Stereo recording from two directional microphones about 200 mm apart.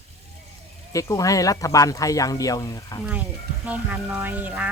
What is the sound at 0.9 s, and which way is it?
Speech, 15° left (ahead or behind).